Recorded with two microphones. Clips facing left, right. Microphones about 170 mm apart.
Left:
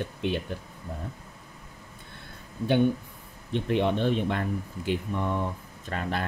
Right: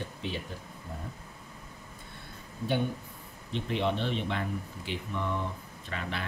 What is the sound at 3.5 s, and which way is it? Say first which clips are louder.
Speech: left 5 dB; 55° left (ahead or behind).